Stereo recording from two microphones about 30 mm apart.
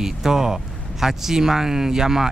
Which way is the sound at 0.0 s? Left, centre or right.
Centre.